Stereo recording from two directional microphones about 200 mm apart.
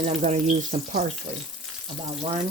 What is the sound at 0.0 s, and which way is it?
Speech, 35° right (ahead or behind).